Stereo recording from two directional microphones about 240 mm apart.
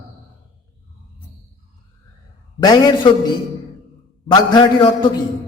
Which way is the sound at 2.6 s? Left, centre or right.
Centre.